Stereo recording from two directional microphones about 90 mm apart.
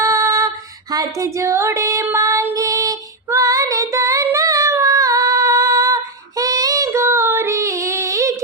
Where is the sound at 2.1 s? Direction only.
35° right (ahead or behind).